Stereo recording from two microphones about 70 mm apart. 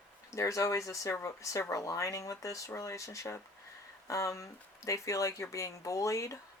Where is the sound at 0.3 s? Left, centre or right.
Left.